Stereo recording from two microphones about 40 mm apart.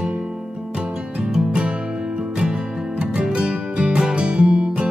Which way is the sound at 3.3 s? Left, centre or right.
Right.